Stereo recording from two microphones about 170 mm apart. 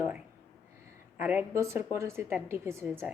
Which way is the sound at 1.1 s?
10° right (ahead or behind).